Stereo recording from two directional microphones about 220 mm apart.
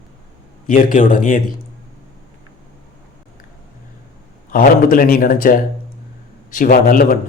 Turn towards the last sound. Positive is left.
turn(degrees=40)  # may be behind; listen again after turning